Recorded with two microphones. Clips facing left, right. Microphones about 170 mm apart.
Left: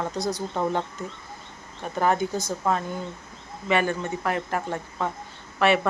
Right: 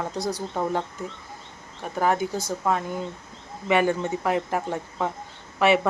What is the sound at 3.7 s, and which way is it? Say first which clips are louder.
Speech: right 2 dB; 15° right (ahead or behind).